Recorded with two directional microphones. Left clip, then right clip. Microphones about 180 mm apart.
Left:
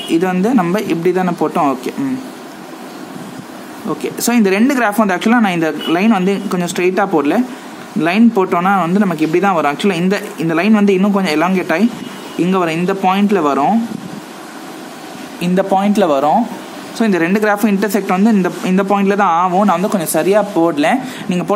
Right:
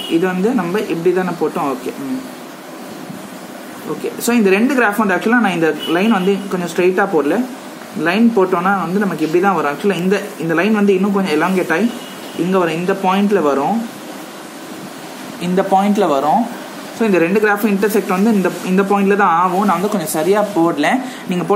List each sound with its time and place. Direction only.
0.1 s speech: 50° left (ahead or behind)
4.2 s speech: 45° left (ahead or behind)
15.4 s speech: 35° left (ahead or behind)